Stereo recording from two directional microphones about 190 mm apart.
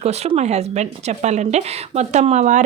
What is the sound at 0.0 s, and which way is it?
Speech, 35° right (ahead or behind).